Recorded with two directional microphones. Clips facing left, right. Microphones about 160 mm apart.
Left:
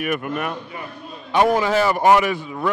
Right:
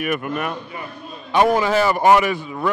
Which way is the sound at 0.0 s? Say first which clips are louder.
Right 1 dB; 15° right (ahead or behind).